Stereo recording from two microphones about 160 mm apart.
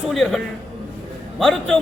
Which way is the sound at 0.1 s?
Centre (ahead or behind).